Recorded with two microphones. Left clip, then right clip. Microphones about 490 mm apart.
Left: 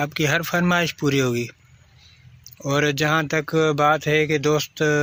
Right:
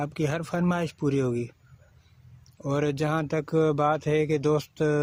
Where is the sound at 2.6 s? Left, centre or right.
Right.